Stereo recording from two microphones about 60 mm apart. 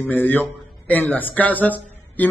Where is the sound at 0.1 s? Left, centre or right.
Left.